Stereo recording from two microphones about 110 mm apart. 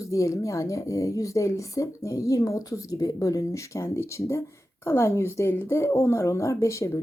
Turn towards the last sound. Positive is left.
turn(degrees=25)  # may be behind; listen again after turning